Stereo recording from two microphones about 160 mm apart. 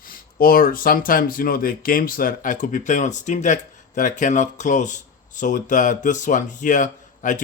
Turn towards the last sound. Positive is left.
turn(degrees=50)  # may be behind; listen again after turning